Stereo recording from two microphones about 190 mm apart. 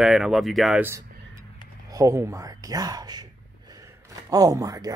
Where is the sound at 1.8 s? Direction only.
15° right (ahead or behind).